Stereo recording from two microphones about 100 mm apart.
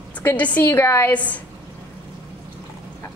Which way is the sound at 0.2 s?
15° left (ahead or behind).